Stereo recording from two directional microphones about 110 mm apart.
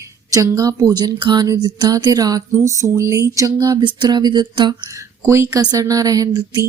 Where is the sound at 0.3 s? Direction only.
30° right (ahead or behind).